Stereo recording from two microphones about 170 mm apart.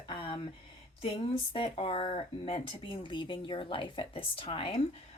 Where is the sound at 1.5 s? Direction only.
30° left (ahead or behind).